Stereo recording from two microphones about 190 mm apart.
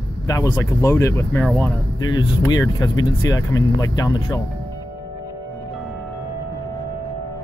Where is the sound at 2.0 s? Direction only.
20° left (ahead or behind).